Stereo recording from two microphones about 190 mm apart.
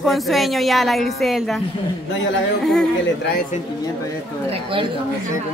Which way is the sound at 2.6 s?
5° left (ahead or behind).